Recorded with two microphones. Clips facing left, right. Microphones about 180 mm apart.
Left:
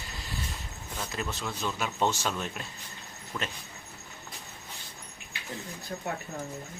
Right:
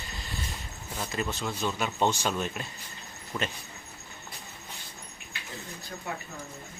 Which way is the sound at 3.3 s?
15° right (ahead or behind).